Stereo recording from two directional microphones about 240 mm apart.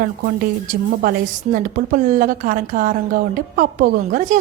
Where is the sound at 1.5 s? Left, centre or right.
Right.